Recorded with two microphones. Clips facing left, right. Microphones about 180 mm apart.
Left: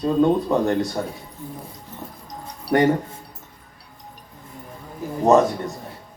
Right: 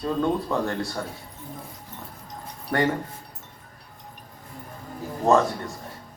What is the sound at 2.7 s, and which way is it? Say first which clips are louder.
Speech: left 6 dB; 35° left (ahead or behind).